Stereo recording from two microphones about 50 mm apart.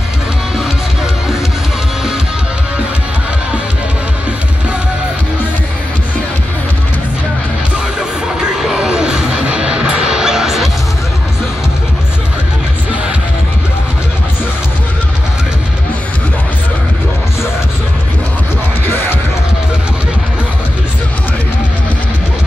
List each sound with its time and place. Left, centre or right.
8.4 s music: centre